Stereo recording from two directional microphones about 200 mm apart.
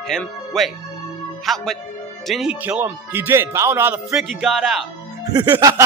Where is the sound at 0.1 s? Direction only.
Centre (ahead or behind).